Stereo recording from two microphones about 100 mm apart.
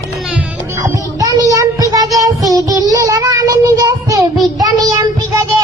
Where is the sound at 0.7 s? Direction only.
30° right (ahead or behind).